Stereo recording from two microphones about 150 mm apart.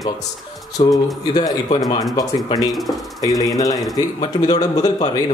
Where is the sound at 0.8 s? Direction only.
35° left (ahead or behind).